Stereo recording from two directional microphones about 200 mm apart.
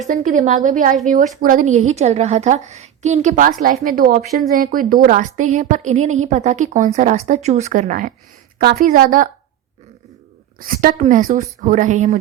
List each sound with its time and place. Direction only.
0.0 s a woman's voice: 35° right (ahead or behind)
10.6 s a woman's voice: 45° right (ahead or behind)